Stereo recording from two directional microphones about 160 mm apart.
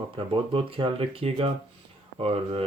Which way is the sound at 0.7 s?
35° right (ahead or behind).